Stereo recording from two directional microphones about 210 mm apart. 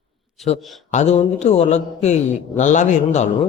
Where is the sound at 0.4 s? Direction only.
35° left (ahead or behind).